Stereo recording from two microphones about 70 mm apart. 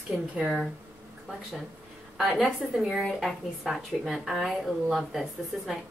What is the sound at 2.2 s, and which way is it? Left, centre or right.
A woman's voice, centre.